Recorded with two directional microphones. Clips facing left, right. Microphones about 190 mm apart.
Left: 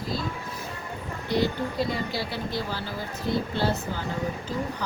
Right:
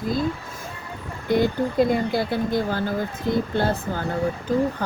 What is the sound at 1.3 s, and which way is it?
Speech, 50° right (ahead or behind).